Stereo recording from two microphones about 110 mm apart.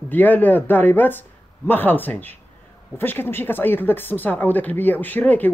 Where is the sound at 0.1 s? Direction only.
15° left (ahead or behind).